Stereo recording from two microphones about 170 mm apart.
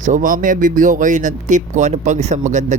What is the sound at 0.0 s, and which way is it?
Speech, 50° right (ahead or behind).